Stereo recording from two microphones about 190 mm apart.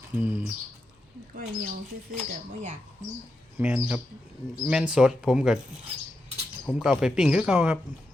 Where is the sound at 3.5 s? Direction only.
5° right (ahead or behind).